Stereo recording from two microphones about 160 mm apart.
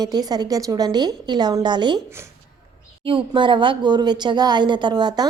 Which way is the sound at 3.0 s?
35° right (ahead or behind).